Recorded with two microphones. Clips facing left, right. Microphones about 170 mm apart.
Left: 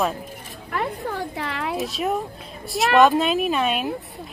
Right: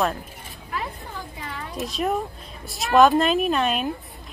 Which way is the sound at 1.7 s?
Centre (ahead or behind).